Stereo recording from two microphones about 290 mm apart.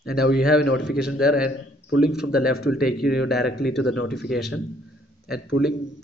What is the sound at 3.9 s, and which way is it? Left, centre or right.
Speech, left.